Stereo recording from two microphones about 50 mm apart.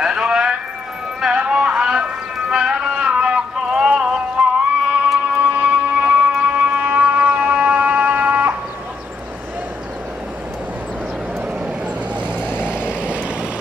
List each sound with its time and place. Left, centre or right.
0.0 s music: centre
1.3 s a sound: centre
2.5 s music: centre
4.8 s music: right
12.4 s vehicle: left
12.6 s vehicle: right